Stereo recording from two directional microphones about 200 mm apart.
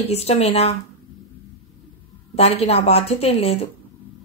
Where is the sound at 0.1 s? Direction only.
30° left (ahead or behind).